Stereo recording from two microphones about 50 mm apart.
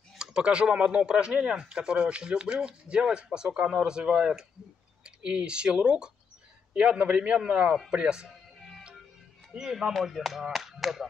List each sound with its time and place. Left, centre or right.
0.2 s speech: centre
9.6 s speech: centre